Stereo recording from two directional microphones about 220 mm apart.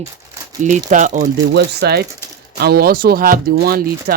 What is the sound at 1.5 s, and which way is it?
Speech, 45° right (ahead or behind).